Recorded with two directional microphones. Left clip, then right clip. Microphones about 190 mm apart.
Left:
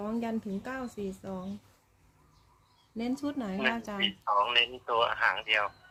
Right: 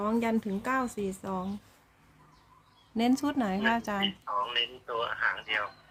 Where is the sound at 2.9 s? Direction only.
30° right (ahead or behind).